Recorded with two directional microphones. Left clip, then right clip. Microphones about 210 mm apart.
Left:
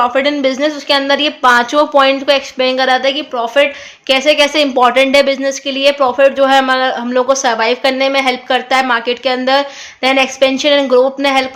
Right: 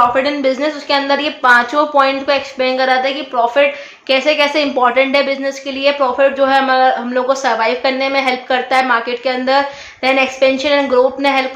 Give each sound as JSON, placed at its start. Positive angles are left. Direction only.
{"t": 0.1, "sound": "a woman's voice", "side_deg": 45}